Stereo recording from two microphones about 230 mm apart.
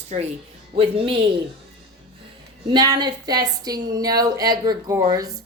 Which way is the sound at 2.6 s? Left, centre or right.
Centre.